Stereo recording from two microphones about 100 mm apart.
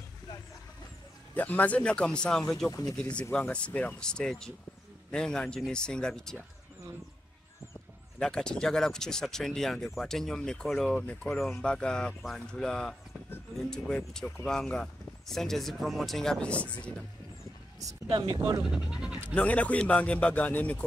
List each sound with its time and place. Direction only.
1.3 s speech: 15° left (ahead or behind)
8.2 s speech: 5° left (ahead or behind)
18.1 s speech: 60° right (ahead or behind)
18.7 s speech: 10° right (ahead or behind)
19.3 s speech: 15° left (ahead or behind)